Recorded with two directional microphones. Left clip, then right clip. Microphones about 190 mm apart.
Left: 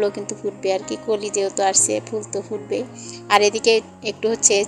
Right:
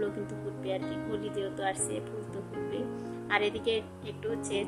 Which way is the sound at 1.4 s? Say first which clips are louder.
Left 13 dB; 35° left (ahead or behind).